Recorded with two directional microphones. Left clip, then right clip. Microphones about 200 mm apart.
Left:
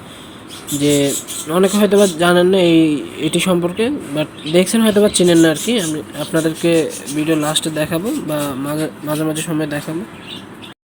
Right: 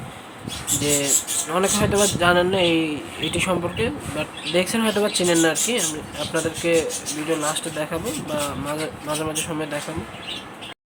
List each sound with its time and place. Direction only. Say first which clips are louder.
0.8 s speech: left 8 dB; 25° left (ahead or behind)